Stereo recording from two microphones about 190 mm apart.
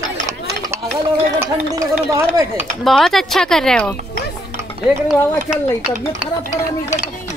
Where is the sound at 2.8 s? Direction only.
Centre (ahead or behind).